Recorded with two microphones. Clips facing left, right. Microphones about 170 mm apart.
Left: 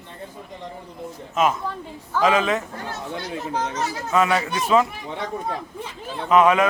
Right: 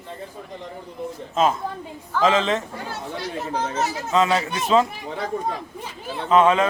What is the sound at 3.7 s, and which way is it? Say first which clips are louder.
A man's voice: right 1 dB; 25° right (ahead or behind).